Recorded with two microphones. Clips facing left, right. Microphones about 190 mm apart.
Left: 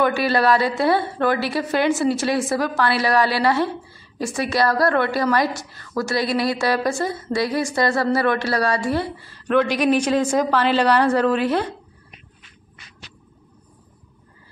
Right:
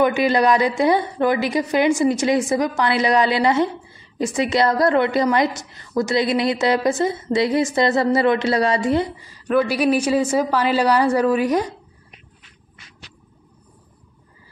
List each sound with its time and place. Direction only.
0.0 s a woman's voice: 15° right (ahead or behind)